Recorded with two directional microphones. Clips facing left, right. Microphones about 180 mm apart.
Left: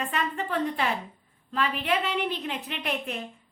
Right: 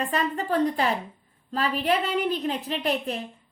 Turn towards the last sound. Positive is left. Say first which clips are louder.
# right 5 dB
turn(degrees=-35)  # may be behind; listen again after turning